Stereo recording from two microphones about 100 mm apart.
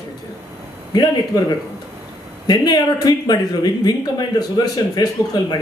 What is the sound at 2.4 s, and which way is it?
Speech, 45° left (ahead or behind).